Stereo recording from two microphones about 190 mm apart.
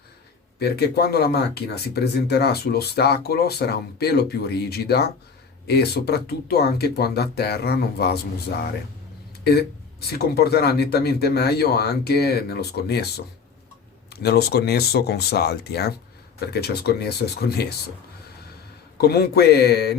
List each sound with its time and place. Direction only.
0.6 s speech: 55° left (ahead or behind)
18.9 s speech: 55° left (ahead or behind)